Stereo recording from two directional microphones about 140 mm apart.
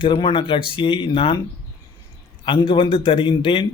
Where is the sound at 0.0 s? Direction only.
35° left (ahead or behind).